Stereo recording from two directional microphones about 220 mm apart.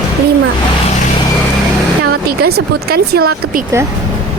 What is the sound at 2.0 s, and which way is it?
Speech, 45° right (ahead or behind).